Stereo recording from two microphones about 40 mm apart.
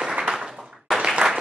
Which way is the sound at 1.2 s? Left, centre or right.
Right.